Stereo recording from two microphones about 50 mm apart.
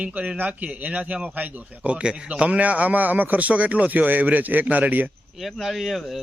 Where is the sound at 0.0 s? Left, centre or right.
Right.